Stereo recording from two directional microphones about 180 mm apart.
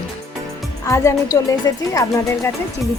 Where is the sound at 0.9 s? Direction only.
20° left (ahead or behind).